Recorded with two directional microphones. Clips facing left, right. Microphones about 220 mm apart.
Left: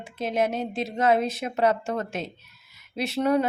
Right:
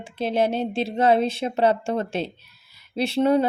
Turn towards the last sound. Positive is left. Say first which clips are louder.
# right 4 dB
turn(degrees=-30)  # may be behind; listen again after turning